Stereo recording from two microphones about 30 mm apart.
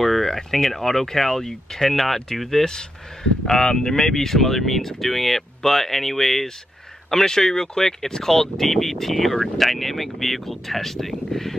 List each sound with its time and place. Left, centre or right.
0.0 s speech: centre
3.4 s speech: centre